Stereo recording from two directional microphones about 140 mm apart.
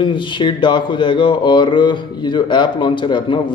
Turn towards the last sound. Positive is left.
turn(degrees=35)  # may be behind; listen again after turning